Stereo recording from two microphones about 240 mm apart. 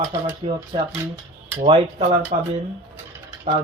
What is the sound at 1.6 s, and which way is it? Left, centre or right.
Speech, right.